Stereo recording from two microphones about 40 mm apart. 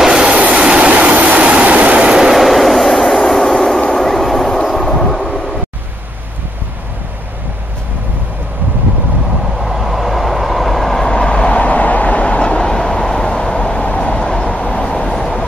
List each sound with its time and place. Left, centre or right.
0.6 s train: right
2.0 s train: centre
2.3 s vehicle: centre
9.6 s vehicle: centre
11.1 s vehicle: left
15.1 s train: centre